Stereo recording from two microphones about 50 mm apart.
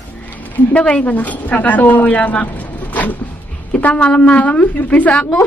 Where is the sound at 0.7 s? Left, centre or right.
Left.